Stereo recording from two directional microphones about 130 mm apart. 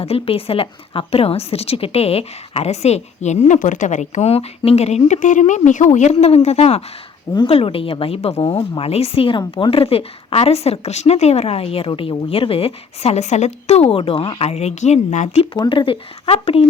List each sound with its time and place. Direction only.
0.0 s a woman's voice: 50° left (ahead or behind)
15.5 s speech: 35° left (ahead or behind)